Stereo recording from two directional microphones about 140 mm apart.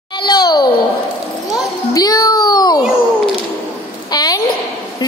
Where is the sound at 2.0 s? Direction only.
25° left (ahead or behind).